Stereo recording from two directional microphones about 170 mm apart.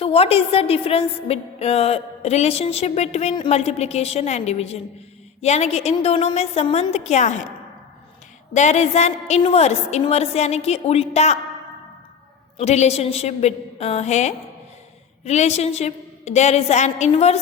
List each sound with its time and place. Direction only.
0.0 s a woman's voice: 35° left (ahead or behind)
8.5 s a woman's voice: 45° left (ahead or behind)
12.5 s a woman's voice: 40° left (ahead or behind)